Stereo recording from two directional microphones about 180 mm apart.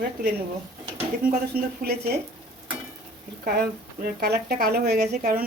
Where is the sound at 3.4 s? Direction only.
60° right (ahead or behind).